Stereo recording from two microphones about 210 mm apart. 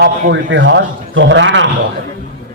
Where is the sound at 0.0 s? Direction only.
55° right (ahead or behind).